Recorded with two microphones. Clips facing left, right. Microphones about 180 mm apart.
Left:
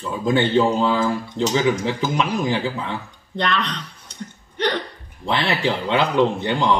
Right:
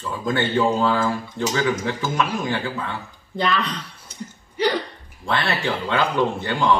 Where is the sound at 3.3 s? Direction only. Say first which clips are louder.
Even; 5° right (ahead or behind).